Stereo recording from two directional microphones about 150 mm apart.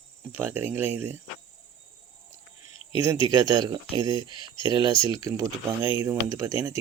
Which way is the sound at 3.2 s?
25° right (ahead or behind).